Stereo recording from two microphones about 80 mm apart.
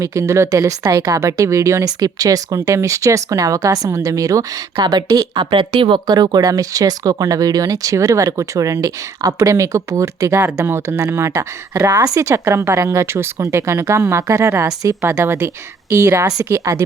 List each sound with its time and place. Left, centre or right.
0.0 s speech: right
4.8 s a woman's voice: right
5.5 s speech: right